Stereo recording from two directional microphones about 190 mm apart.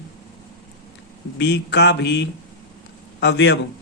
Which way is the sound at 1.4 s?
65° left (ahead or behind).